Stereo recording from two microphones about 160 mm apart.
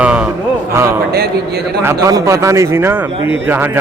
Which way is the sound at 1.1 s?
80° right.